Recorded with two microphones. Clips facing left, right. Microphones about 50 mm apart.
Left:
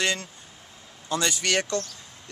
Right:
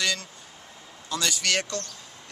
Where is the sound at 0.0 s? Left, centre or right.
Left.